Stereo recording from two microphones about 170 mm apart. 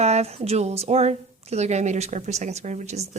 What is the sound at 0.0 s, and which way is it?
A woman's voice, 40° right (ahead or behind).